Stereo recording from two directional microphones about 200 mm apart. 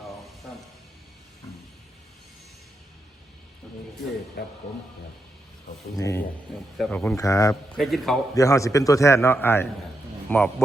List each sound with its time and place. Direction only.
6.0 s a man's voice: 15° left (ahead or behind)
6.7 s speech: 5° left (ahead or behind)
7.2 s a man's voice: 15° left (ahead or behind)
7.8 s speech: centre (ahead or behind)
8.4 s a man's voice: 15° left (ahead or behind)